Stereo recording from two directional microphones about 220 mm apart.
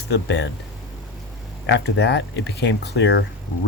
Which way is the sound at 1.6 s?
50° left (ahead or behind).